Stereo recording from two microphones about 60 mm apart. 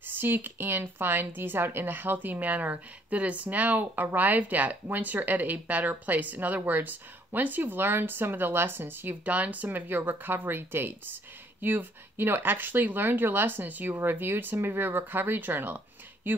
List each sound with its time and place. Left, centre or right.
0.0 s speech: right